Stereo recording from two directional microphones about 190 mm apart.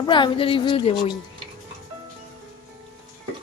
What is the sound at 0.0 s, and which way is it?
A woman's voice, 25° left (ahead or behind).